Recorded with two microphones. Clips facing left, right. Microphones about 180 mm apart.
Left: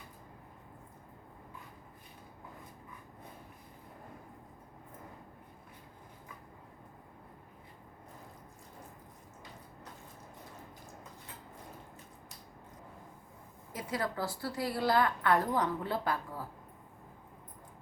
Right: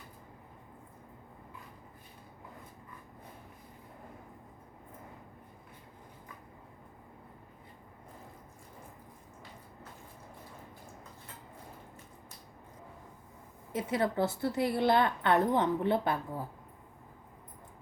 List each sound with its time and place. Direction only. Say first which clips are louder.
13.7 s a woman's voice: right 6 dB; 25° right (ahead or behind)